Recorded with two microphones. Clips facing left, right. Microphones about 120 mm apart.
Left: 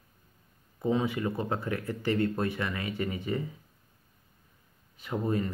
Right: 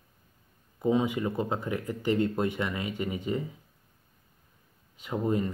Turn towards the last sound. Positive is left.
turn(degrees=-20)  # may be behind; listen again after turning